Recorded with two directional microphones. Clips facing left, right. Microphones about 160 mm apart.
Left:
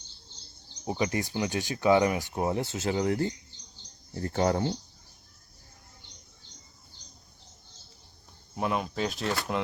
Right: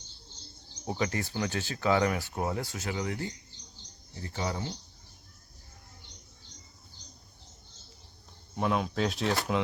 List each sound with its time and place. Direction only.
0.9 s speech: 15° left (ahead or behind); by 3.3 s 35° left (ahead or behind)
4.1 s speech: 50° left (ahead or behind)
8.5 s speech: centre (ahead or behind)